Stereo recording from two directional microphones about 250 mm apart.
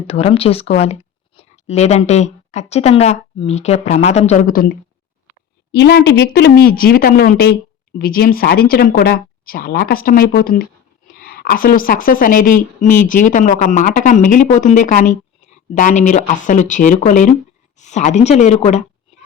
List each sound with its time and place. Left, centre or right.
0.1 s speech: left
5.7 s speech: left